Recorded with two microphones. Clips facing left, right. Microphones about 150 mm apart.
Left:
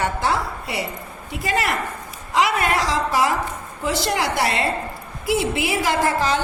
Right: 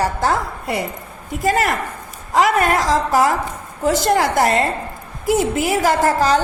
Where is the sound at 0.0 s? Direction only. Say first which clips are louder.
Right 3 dB; 45° right (ahead or behind).